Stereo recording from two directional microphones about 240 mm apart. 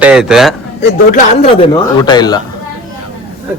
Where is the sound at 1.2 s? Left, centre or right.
Left.